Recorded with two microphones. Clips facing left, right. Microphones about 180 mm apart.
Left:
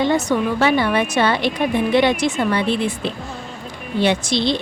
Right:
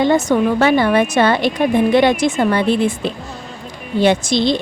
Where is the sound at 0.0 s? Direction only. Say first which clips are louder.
Right 4 dB; 50° right (ahead or behind).